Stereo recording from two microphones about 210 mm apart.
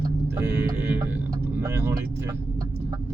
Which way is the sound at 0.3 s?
10° right (ahead or behind).